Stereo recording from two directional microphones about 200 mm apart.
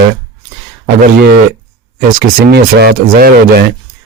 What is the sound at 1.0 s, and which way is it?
Speech, 55° right (ahead or behind).